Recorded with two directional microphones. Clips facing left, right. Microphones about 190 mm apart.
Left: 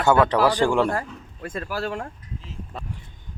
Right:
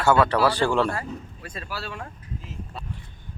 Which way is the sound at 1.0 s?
50° left (ahead or behind).